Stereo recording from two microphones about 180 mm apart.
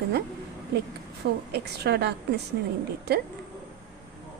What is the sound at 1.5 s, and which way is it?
Speech, 65° right (ahead or behind).